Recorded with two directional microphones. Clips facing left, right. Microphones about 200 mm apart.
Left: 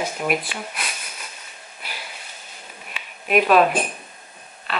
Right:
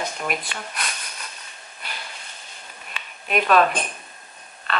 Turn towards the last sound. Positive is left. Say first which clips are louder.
# right 1 dB
turn(degrees=5)  # may be behind; listen again after turning